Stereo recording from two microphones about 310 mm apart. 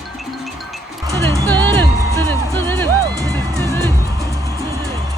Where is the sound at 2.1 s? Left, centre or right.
Centre.